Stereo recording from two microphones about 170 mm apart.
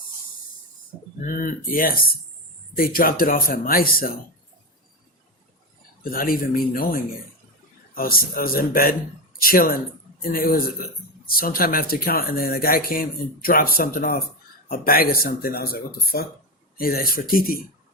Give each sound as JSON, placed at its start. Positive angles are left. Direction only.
{"t": 1.2, "sound": "speech", "side_deg": 55}
{"t": 6.0, "sound": "speech", "side_deg": 55}